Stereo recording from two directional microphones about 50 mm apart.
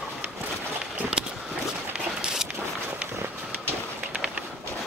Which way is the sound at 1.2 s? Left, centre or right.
Centre.